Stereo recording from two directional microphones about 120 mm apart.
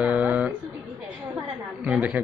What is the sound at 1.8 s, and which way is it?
Speech, 10° right (ahead or behind).